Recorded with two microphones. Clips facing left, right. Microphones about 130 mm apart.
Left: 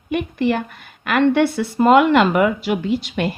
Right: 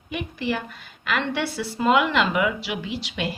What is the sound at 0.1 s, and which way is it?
A woman's voice, 55° left (ahead or behind).